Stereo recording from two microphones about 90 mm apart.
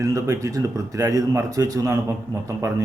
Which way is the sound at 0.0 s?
40° right (ahead or behind).